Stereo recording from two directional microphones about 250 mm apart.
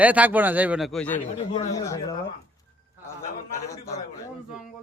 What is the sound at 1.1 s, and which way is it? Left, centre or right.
Speech, left.